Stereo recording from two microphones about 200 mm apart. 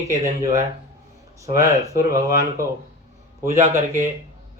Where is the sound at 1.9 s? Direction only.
15° right (ahead or behind).